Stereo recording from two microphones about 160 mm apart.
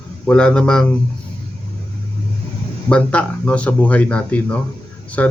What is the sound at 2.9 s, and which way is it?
Speech, 5° left (ahead or behind).